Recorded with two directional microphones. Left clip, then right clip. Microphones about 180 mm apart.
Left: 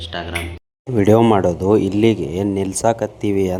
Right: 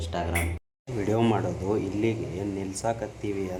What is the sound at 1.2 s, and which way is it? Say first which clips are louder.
Speech: left 12 dB; 40° left (ahead or behind).